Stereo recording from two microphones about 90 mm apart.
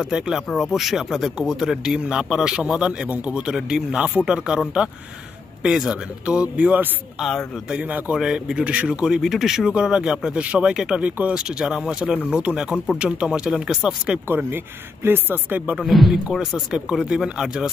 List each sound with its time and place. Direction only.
0.0 s speech: 5° right (ahead or behind)
7.2 s speech: centre (ahead or behind)
7.7 s speech: 10° right (ahead or behind)
14.2 s speech: 25° right (ahead or behind)
15.7 s speech: centre (ahead or behind)